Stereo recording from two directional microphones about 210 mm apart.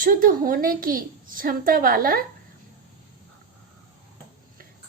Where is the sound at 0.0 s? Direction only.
40° right (ahead or behind).